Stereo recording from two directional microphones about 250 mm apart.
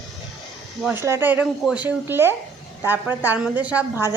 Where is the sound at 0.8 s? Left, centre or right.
Centre.